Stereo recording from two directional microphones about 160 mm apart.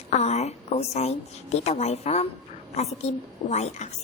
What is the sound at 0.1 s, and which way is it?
A woman's voice, 45° left (ahead or behind).